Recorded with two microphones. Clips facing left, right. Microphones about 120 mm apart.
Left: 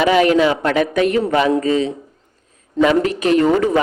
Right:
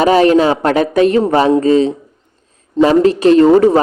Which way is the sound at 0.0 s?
35° right (ahead or behind).